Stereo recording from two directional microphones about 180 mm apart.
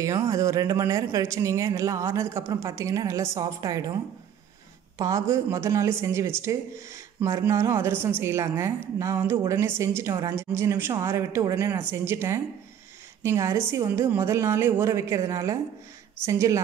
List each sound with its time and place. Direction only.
0.0 s speech: 20° right (ahead or behind)
4.9 s speech: 20° right (ahead or behind)